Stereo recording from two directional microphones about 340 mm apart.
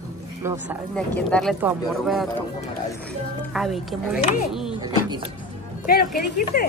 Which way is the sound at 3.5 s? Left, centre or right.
Centre.